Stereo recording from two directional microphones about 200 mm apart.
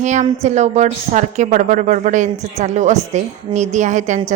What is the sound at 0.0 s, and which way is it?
A woman's voice, 35° right (ahead or behind).